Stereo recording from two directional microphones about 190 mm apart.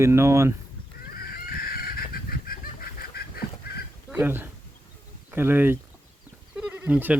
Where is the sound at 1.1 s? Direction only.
50° left (ahead or behind).